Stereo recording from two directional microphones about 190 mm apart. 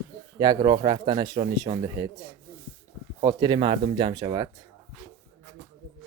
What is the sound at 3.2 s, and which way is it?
Speech, 20° right (ahead or behind).